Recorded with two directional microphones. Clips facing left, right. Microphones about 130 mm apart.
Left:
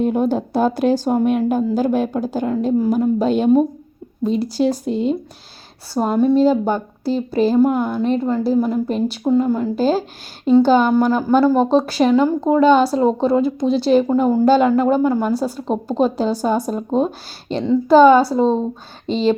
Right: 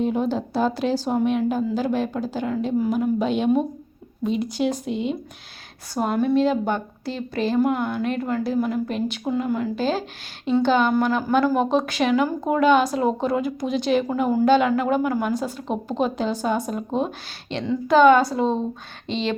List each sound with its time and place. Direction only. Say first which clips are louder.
0.0 s a woman's voice: left 5 dB; 50° left (ahead or behind)